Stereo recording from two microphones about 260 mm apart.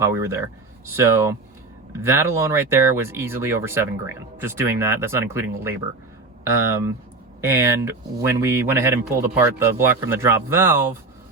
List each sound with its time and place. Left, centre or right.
0.0 s speech: centre